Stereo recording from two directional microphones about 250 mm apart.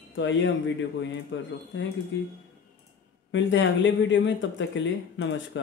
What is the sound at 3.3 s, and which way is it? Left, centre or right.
Speech, left.